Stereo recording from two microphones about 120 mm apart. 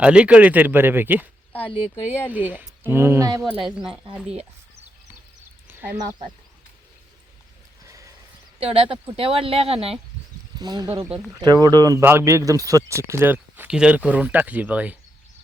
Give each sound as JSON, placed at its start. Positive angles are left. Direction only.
{"t": 0.0, "sound": "speech", "side_deg": -10}
{"t": 2.3, "sound": "speech", "side_deg": -15}
{"t": 3.7, "sound": "speech", "side_deg": -5}
{"t": 5.6, "sound": "a sound", "side_deg": -15}
{"t": 7.9, "sound": "horse", "side_deg": -25}
{"t": 8.5, "sound": "speech", "side_deg": -50}
{"t": 10.6, "sound": "speech", "side_deg": -35}